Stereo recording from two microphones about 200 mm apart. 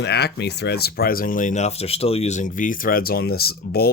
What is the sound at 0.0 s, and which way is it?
Speech, 55° left (ahead or behind).